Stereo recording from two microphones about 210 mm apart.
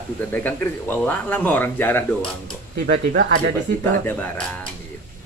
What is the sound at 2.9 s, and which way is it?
Speech, 55° right (ahead or behind).